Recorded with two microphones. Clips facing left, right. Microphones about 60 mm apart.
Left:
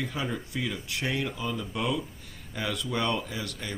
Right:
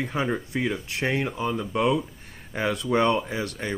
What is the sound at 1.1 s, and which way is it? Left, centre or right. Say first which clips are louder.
Speech: right 5 dB; right.